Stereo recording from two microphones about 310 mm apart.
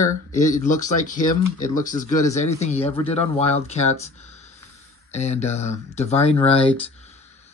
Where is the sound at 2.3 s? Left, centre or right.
Left.